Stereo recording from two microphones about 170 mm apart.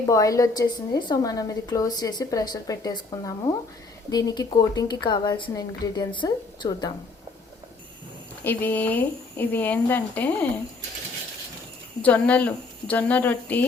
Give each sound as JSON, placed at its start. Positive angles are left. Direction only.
{"t": 0.0, "sound": "a woman's voice", "side_deg": 20}
{"t": 8.4, "sound": "speech", "side_deg": 10}
{"t": 12.0, "sound": "speech", "side_deg": 10}